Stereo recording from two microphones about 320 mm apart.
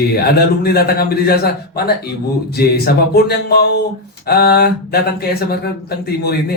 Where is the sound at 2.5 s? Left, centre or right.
Left.